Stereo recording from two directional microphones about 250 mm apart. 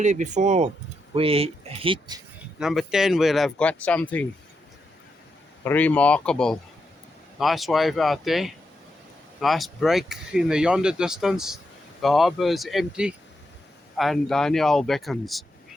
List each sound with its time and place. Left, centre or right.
0.0 s speech: right
2.6 s speech: centre
5.6 s speech: centre